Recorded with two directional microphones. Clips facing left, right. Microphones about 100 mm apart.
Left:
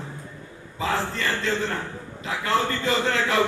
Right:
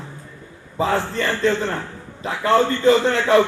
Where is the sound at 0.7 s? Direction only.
30° right (ahead or behind).